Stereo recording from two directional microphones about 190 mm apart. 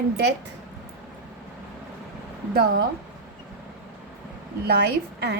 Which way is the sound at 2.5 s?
55° right (ahead or behind).